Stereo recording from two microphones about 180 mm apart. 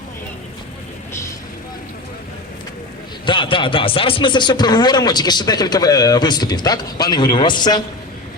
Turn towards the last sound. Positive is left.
turn(degrees=25)  # may be behind; listen again after turning